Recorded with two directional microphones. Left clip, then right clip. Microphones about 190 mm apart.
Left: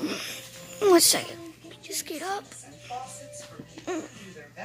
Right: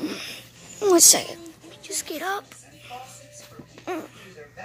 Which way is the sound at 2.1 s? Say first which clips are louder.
Right 4 dB; 5° right (ahead or behind).